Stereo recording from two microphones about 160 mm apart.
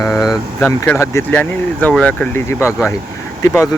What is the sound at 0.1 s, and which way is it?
Vehicle, 5° right (ahead or behind).